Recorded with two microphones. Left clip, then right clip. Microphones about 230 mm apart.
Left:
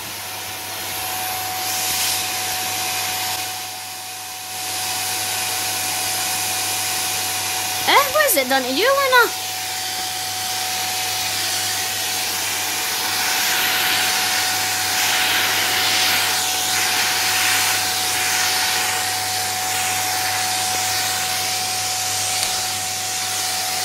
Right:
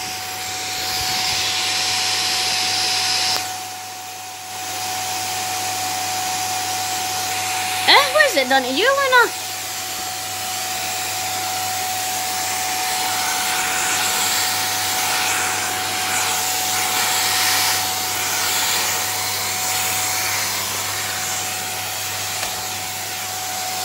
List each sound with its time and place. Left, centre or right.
7.8 s a sound: centre
13.5 s sanding: centre
15.0 s vacuum cleaner: centre
16.9 s hair dryer: centre